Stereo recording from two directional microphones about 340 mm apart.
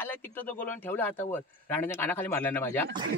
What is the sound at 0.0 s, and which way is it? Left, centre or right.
Speech, centre.